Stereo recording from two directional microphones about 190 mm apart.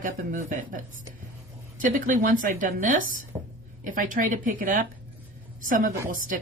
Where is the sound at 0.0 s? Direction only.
45° right (ahead or behind).